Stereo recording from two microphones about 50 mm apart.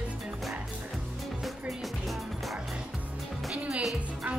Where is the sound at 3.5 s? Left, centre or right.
Right.